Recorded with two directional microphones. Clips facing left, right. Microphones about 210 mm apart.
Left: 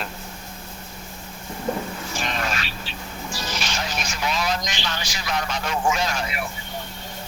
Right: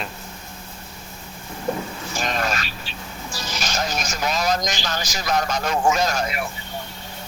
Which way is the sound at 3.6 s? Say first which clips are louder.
Right 3 dB; 40° right (ahead or behind).